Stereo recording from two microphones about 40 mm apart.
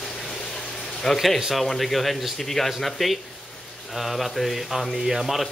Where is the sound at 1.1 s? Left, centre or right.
Centre.